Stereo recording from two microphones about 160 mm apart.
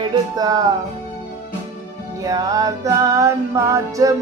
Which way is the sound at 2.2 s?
20° right (ahead or behind).